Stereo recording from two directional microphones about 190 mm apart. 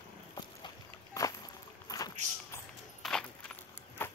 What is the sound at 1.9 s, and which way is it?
Vehicle, 20° left (ahead or behind).